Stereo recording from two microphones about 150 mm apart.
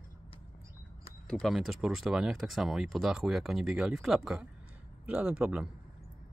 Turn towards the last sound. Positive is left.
turn(degrees=-10)  # may be behind; listen again after turning